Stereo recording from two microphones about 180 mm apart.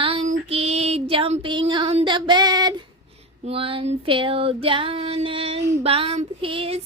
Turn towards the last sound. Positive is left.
turn(degrees=-30)  # may be behind; listen again after turning